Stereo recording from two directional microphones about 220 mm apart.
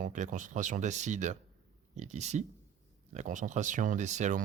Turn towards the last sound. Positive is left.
turn(degrees=-35)  # may be behind; listen again after turning